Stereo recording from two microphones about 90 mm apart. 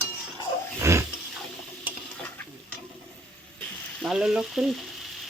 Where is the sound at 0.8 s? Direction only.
30° right (ahead or behind).